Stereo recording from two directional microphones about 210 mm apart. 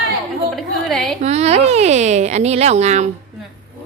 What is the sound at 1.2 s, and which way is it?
Speech, 30° right (ahead or behind).